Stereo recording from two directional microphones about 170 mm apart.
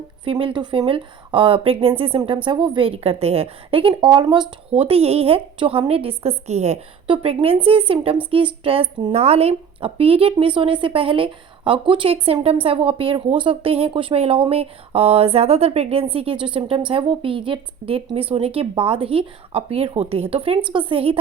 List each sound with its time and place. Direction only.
0.3 s a woman's voice: 30° right (ahead or behind)